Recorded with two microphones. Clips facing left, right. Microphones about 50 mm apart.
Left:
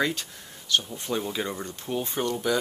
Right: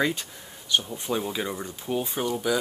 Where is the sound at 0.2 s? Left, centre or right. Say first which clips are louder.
Even; centre.